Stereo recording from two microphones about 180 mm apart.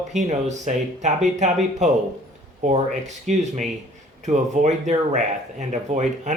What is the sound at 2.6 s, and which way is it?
Speech, 40° right (ahead or behind).